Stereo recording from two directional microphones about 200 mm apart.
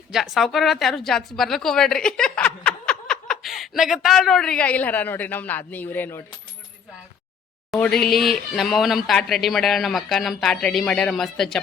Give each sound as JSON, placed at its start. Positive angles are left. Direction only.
{"t": 0.1, "sound": "a woman's voice", "side_deg": 0}
{"t": 7.7, "sound": "a woman's voice", "side_deg": 5}